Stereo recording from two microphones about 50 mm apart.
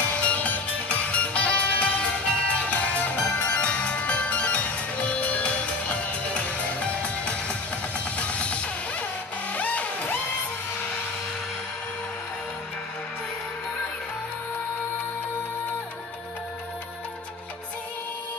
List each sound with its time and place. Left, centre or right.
0.0 s music: left